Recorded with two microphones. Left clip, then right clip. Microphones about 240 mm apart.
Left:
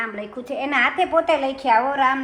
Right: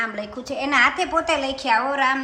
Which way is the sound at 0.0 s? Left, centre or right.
Centre.